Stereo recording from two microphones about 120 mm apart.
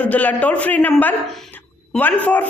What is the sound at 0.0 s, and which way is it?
A man's voice, 10° left (ahead or behind).